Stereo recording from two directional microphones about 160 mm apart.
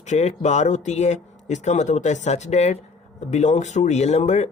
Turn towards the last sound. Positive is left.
turn(degrees=45)  # may be behind; listen again after turning